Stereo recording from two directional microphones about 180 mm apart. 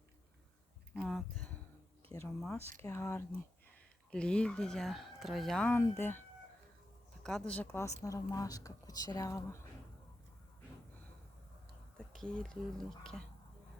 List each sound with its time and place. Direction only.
0.9 s speech: centre (ahead or behind)
11.9 s speech: 5° left (ahead or behind)